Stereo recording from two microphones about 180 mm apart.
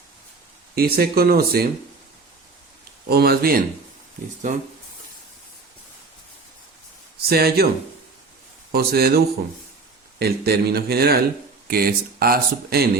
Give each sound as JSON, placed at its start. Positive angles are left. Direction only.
{"t": 0.8, "sound": "speech", "side_deg": -60}
{"t": 3.1, "sound": "speech", "side_deg": -60}
{"t": 4.4, "sound": "speech", "side_deg": -45}
{"t": 7.2, "sound": "speech", "side_deg": -60}
{"t": 8.7, "sound": "speech", "side_deg": -60}